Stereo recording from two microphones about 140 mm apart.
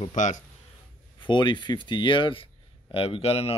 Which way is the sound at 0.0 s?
60° left (ahead or behind).